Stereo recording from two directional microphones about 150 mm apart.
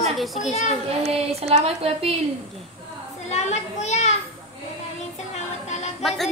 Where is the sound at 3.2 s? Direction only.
50° left (ahead or behind).